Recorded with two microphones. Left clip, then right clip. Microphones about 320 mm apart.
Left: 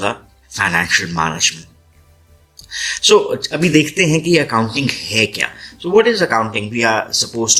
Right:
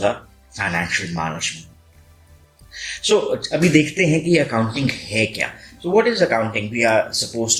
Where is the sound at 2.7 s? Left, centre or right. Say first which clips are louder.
Left 7 dB; left.